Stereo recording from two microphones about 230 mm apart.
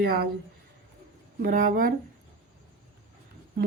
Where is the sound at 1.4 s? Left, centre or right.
Right.